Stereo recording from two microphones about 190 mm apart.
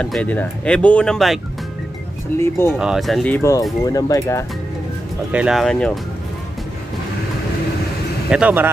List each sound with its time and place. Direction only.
0.0 s speech: 5° left (ahead or behind)
2.3 s speech: 15° left (ahead or behind)
2.8 s speech: centre (ahead or behind); by 4.5 s 15° left (ahead or behind)
5.3 s speech: 5° right (ahead or behind)
8.3 s speech: 5° right (ahead or behind)